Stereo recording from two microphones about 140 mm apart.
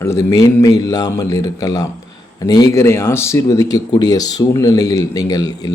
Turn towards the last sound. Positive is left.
turn(degrees=25)  # may be behind; listen again after turning